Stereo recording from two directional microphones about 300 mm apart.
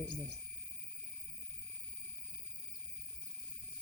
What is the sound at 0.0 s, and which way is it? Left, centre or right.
Speech, left.